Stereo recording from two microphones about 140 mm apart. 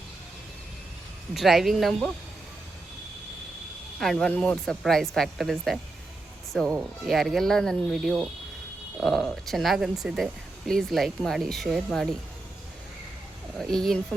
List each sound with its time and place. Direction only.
1.3 s speech: centre (ahead or behind)
4.0 s speech: 5° left (ahead or behind)
13.6 s speech: 5° left (ahead or behind)